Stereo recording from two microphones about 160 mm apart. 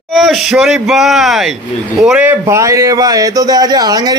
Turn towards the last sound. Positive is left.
turn(degrees=-25)  # may be behind; listen again after turning